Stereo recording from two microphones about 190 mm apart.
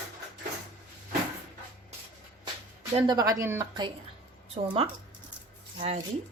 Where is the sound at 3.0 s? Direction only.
20° right (ahead or behind).